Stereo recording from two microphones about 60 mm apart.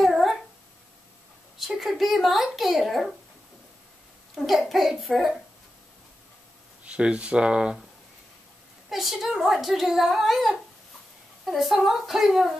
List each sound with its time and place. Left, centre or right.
0.0 s a sound: centre
1.8 s a child's voice: centre
4.4 s a child's voice: centre
6.8 s speech: centre
8.8 s a child's voice: centre